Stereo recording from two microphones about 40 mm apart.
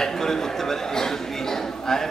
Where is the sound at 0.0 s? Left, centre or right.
Centre.